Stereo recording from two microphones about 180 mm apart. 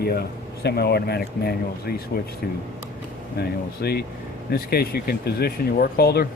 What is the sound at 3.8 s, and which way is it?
A man's voice, 65° left (ahead or behind).